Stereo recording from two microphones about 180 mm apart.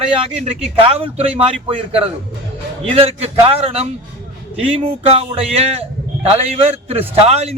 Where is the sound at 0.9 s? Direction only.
35° right (ahead or behind).